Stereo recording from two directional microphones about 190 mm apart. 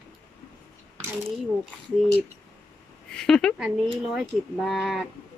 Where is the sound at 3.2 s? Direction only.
5° left (ahead or behind).